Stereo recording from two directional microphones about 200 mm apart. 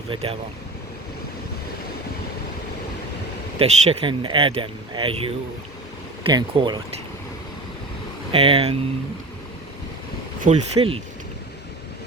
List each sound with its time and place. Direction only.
0.1 s speech: 30° right (ahead or behind)
3.6 s speech: 25° right (ahead or behind)
8.3 s speech: 30° right (ahead or behind)
10.4 s speech: 30° right (ahead or behind)